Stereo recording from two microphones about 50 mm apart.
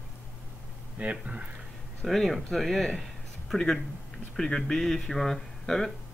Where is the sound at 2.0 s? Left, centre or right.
Centre.